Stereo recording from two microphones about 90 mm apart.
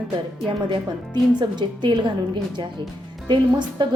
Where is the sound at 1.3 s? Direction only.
55° right (ahead or behind).